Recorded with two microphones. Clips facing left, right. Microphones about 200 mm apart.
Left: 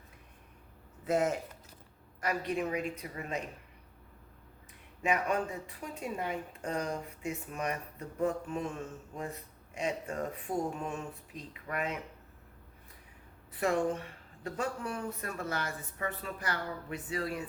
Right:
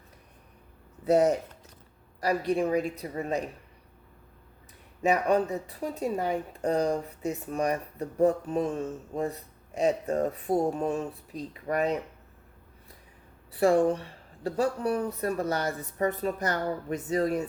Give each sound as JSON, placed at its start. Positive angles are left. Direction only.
{"t": 1.0, "sound": "speech", "side_deg": -40}
{"t": 5.0, "sound": "speech", "side_deg": -35}
{"t": 13.5, "sound": "speech", "side_deg": -35}